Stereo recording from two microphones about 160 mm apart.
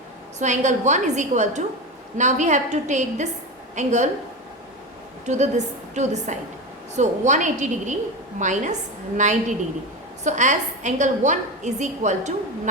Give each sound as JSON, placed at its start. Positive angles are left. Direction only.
{"t": 0.3, "sound": "a woman's voice", "side_deg": -50}
{"t": 5.2, "sound": "a woman's voice", "side_deg": -45}